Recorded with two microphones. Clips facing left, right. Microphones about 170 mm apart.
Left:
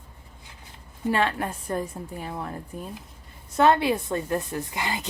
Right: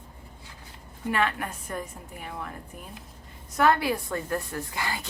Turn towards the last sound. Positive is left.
turn(degrees=20)  # may be behind; listen again after turning